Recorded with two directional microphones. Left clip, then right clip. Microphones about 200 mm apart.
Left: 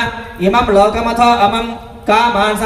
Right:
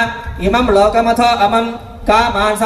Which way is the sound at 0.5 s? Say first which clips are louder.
Even; 35° right (ahead or behind).